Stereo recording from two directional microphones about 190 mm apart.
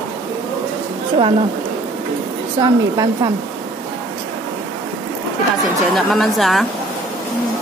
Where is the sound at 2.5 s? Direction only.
20° right (ahead or behind).